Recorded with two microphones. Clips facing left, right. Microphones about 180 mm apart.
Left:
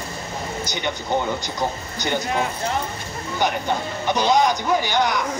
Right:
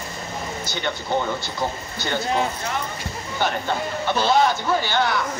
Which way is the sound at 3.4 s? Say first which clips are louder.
Left 1 dB; 15° left (ahead or behind).